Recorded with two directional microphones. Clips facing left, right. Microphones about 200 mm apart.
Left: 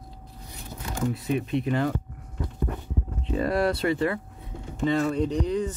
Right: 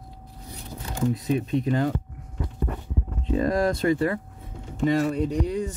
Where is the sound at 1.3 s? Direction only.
35° right (ahead or behind).